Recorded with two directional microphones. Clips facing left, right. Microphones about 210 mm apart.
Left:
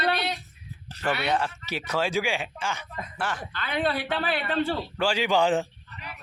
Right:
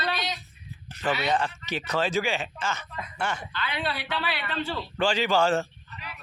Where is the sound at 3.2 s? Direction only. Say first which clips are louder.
Right 1 dB; centre (ahead or behind).